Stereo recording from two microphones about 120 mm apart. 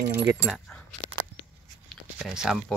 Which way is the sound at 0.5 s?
5° left (ahead or behind).